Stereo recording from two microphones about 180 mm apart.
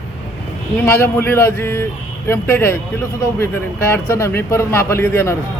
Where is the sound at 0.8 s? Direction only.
15° left (ahead or behind).